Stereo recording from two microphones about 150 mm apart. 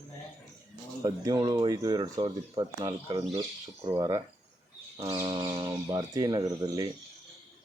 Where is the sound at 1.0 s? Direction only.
25° right (ahead or behind).